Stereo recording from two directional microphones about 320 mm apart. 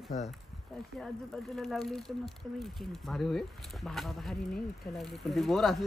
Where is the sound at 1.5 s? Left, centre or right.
Centre.